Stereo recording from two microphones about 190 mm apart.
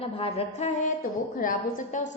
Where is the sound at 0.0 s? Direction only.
30° left (ahead or behind).